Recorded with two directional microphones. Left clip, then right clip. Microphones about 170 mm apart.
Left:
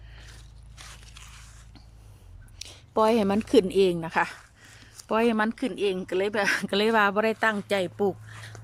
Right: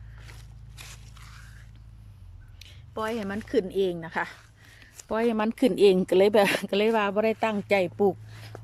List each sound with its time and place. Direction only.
2.6 s speech: 30° left (ahead or behind); by 5.5 s centre (ahead or behind)
5.5 s speech: 20° right (ahead or behind)